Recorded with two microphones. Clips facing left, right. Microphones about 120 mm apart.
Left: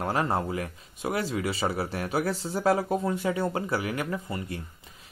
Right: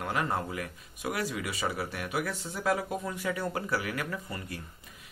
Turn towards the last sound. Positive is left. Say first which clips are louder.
# left 5 dB
turn(degrees=25)  # may be behind; listen again after turning